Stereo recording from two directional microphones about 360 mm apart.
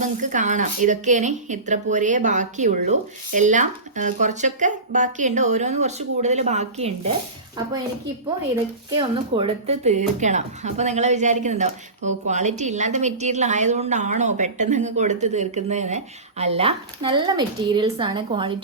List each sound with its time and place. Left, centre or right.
0.0 s speech: right
9.0 s speech: centre